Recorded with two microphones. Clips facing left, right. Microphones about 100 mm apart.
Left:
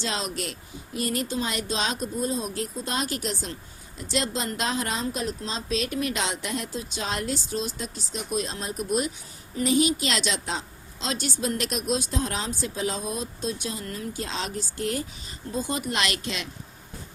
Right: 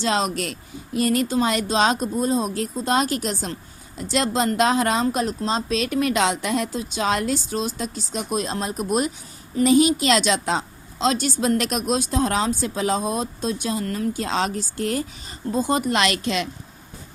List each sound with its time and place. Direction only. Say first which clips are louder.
0.0 s speech: right 8 dB; 55° right (ahead or behind)
5.2 s speech: right 7 dB; 40° right (ahead or behind)
5.9 s a woman's voice: right 8 dB; 85° right; by 9.0 s 55° right (ahead or behind)
9.6 s speech: right 6 dB; 65° right (ahead or behind)
11.3 s speech: right 7 dB; 85° right
11.7 s speech: right 5 dB; 60° right (ahead or behind); by 15.8 s 40° right (ahead or behind)
15.9 s a woman's voice: right 7 dB; 70° right (ahead or behind)